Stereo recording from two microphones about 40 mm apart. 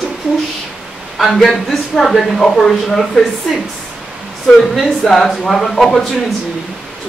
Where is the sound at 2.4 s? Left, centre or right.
Centre.